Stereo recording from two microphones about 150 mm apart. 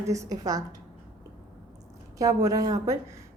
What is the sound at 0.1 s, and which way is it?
Speech, 25° right (ahead or behind).